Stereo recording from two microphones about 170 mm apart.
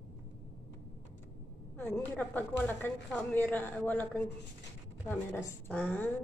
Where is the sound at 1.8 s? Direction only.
10° left (ahead or behind).